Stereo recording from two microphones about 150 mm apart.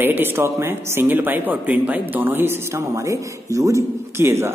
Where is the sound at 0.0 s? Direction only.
15° right (ahead or behind).